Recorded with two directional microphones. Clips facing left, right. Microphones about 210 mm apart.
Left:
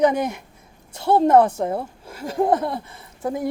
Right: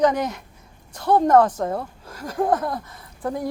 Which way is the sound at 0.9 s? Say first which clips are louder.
Left 1 dB; 25° left (ahead or behind).